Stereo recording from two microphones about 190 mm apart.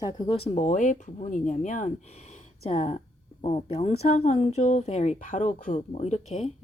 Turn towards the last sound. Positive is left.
turn(degrees=35)  # may be behind; listen again after turning